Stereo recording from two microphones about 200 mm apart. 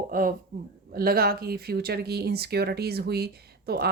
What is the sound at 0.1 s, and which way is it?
Speech, 45° right (ahead or behind).